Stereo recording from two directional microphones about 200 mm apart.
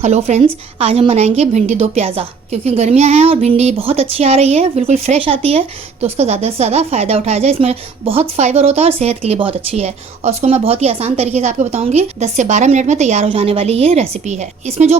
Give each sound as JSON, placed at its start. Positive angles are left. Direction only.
{"t": 0.0, "sound": "a woman's voice", "side_deg": -35}